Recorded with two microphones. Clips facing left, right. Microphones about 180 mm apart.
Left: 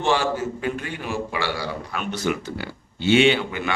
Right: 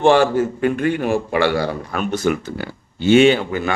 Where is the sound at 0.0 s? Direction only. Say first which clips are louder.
Right 8 dB; 55° right (ahead or behind).